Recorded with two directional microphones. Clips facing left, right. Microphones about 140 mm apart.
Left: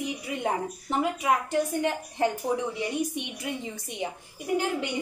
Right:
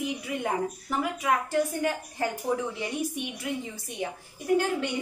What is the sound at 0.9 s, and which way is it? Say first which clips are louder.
A woman's voice: left 2 dB; 25° left (ahead or behind).